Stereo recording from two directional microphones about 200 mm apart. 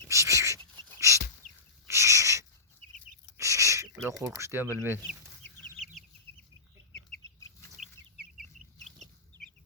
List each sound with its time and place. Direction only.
0.1 s dog: 15° right (ahead or behind)
0.9 s chicken: 15° right (ahead or behind)
1.9 s owl: 15° right (ahead or behind)
3.3 s a sound: 15° right (ahead or behind)
4.0 s speech: 15° right (ahead or behind)
5.4 s chicken: 10° left (ahead or behind)
7.8 s chicken: centre (ahead or behind)